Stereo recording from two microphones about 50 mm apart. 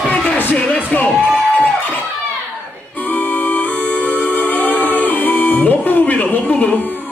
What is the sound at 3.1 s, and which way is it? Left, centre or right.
Music, left.